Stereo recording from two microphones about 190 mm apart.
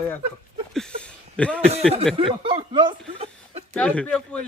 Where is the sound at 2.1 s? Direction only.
30° right (ahead or behind).